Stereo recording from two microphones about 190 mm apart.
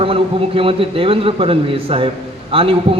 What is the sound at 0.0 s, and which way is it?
A man's voice, 30° right (ahead or behind).